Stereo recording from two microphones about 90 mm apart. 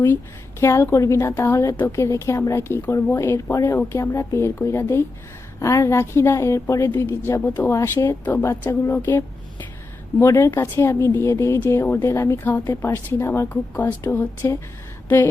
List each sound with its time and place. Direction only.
0.6 s a woman's voice: 30° left (ahead or behind)
12.5 s a woman's voice: 20° left (ahead or behind)